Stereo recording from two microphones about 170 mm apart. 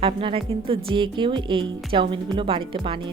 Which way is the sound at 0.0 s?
30° right (ahead or behind).